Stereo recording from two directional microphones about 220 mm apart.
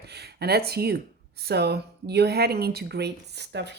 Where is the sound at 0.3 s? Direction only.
45° right (ahead or behind).